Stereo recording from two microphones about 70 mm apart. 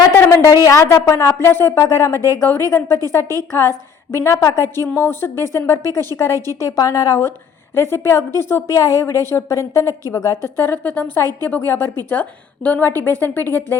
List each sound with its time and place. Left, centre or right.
0.1 s a sound: left
0.5 s a woman's voice: left
6.3 s a woman's voice: right
6.6 s a woman's voice: left